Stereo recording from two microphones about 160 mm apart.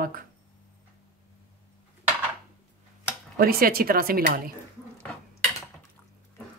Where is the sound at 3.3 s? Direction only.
65° right (ahead or behind).